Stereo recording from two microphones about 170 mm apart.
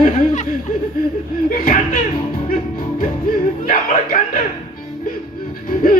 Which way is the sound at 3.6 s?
50° left (ahead or behind).